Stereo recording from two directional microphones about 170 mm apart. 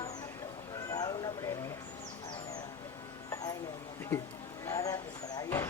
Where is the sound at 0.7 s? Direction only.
20° left (ahead or behind).